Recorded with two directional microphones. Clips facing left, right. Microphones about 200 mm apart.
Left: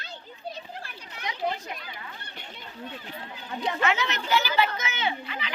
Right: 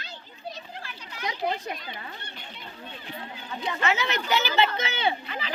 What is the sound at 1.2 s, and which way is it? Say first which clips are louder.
Children playing: right 2 dB; 35° right (ahead or behind).